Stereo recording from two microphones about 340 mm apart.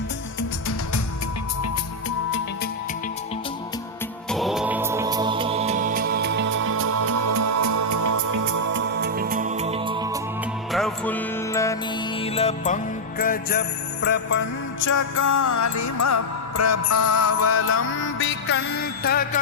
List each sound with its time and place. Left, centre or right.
1.6 s music: left
4.3 s music: centre; by 8.7 s right
8.7 s music: right; by 10.2 s centre
10.7 s music: centre; by 14.4 s left
14.8 s music: left